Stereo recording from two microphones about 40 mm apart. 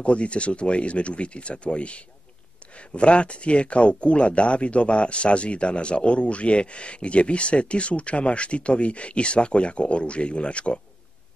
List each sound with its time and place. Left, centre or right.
0.0 s speech: left